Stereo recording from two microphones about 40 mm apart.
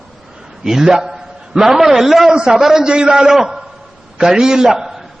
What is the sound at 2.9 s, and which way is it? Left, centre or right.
A man's voice, right.